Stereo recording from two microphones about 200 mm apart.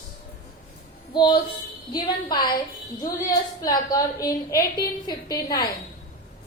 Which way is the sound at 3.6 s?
20° left (ahead or behind).